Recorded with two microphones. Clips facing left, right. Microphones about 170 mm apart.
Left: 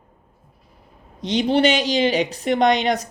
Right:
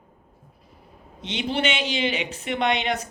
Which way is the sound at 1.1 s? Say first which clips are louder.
Left 8 dB; 40° left (ahead or behind).